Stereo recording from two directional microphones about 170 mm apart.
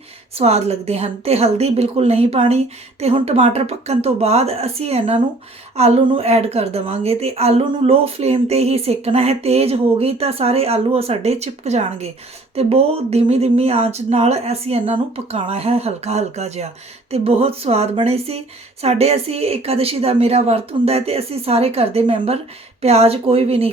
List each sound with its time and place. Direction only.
0.3 s a woman's voice: 40° right (ahead or behind)